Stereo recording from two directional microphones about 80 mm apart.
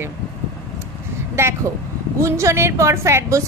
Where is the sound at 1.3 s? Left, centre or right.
Right.